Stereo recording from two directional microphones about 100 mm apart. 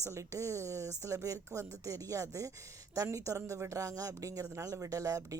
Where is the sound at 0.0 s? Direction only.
30° right (ahead or behind).